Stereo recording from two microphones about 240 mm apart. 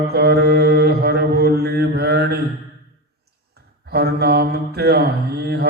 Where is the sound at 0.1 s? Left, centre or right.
Right.